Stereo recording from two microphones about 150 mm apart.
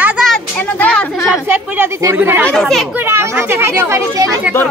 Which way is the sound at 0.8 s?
5° left (ahead or behind).